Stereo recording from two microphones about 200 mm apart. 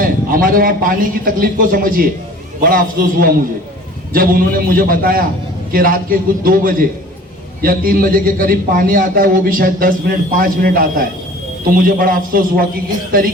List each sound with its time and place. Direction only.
0.0 s a man's voice: 45° right (ahead or behind)